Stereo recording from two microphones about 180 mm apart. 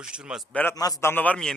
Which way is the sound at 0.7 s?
20° left (ahead or behind).